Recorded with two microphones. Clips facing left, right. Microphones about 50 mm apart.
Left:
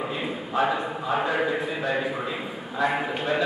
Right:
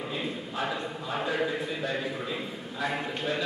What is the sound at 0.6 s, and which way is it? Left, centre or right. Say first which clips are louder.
A man's voice: left 9 dB; centre.